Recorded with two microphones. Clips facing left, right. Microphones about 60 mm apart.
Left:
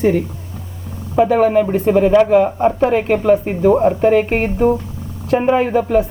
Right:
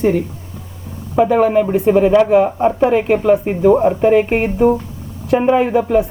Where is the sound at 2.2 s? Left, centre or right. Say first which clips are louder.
Even; centre.